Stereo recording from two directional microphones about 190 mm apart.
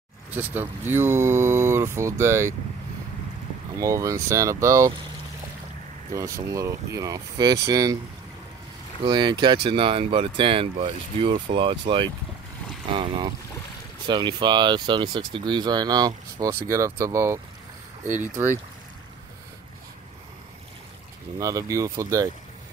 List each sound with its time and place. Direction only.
0.3 s speech: 10° right (ahead or behind)
3.7 s speech: 15° right (ahead or behind)
6.1 s speech: 15° right (ahead or behind)
9.0 s speech: 25° right (ahead or behind)
21.4 s speech: 15° right (ahead or behind)